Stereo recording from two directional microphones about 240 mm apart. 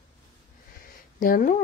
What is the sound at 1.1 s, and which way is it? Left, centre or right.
Speech, left.